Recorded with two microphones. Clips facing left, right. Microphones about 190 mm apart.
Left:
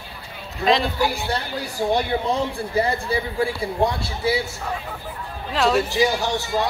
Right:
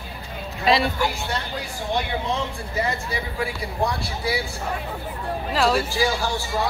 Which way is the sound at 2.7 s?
30° left (ahead or behind).